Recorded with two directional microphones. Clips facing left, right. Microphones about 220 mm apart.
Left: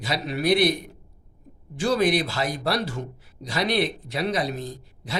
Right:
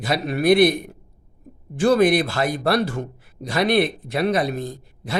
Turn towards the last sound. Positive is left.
turn(degrees=-55)  # may be behind; listen again after turning